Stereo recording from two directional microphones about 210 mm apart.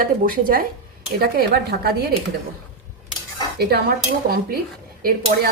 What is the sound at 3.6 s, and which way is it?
A woman's voice, 50° right (ahead or behind).